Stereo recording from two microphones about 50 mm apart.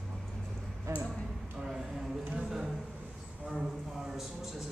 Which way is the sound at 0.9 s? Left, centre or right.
Right.